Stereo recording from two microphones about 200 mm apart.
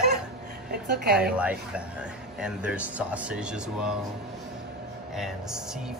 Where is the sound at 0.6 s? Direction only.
55° right (ahead or behind).